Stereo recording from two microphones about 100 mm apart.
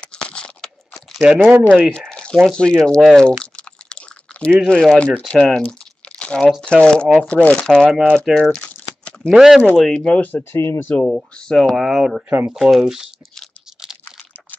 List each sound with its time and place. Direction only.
0.0 s crunch: 10° left (ahead or behind)
1.2 s speech: 10° right (ahead or behind)
1.9 s speech: 10° left (ahead or behind)
3.5 s a sound: 10° left (ahead or behind)
4.6 s speech: 5° left (ahead or behind)
5.6 s crumpling: 10° left (ahead or behind)
6.6 s speech: 10° left (ahead or behind)
8.4 s crumpling: 10° left (ahead or behind)
9.3 s speech: 5° right (ahead or behind); by 11.1 s 20° left (ahead or behind)
11.1 s speech: 5° left (ahead or behind)
12.3 s speech: 20° right (ahead or behind)
12.5 s a sound: centre (ahead or behind)